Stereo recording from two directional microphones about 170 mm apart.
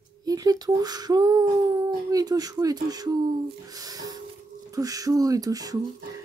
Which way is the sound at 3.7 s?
20° right (ahead or behind).